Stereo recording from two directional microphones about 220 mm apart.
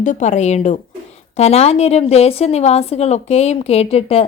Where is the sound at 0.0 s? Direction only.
35° left (ahead or behind).